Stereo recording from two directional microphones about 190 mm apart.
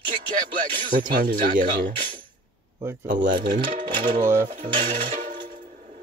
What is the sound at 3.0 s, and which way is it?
Speech, 45° right (ahead or behind).